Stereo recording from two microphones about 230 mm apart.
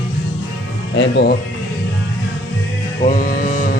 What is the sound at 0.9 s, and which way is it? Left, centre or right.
Speech, left.